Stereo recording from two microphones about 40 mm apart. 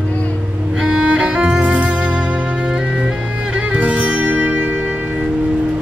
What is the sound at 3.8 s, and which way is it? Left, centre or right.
Music, right.